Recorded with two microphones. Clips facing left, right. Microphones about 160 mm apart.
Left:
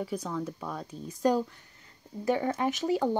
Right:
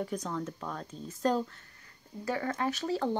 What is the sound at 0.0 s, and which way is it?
Speech, 5° left (ahead or behind).